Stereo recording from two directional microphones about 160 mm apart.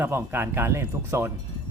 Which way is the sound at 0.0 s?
15° right (ahead or behind).